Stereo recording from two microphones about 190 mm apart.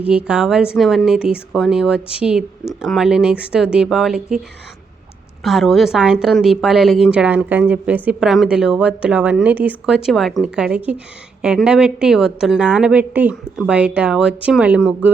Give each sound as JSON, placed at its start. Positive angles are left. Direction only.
{"t": 0.1, "sound": "speech", "side_deg": -5}
{"t": 5.4, "sound": "speech", "side_deg": 0}